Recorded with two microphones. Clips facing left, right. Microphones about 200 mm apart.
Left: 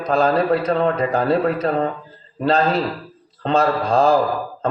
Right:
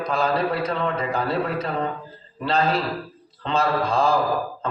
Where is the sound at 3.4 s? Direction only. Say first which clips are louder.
Left 4 dB; 35° left (ahead or behind).